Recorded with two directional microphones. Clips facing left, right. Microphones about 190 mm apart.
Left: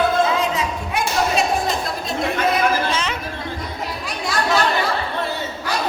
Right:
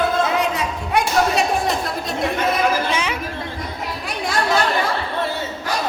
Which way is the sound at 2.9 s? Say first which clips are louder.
Right 1 dB; 10° right (ahead or behind).